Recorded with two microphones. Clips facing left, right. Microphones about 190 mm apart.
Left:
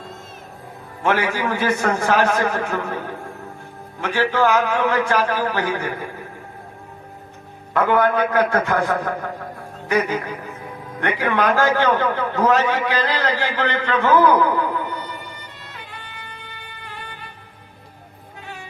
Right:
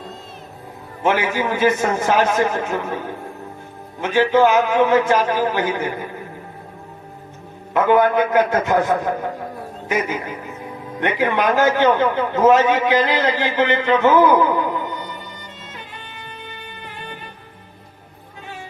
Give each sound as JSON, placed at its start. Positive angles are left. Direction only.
{"t": 1.0, "sound": "a man's voice", "side_deg": -20}
{"t": 4.0, "sound": "a man's voice", "side_deg": -20}
{"t": 7.7, "sound": "a man's voice", "side_deg": -20}
{"t": 15.6, "sound": "music", "side_deg": -20}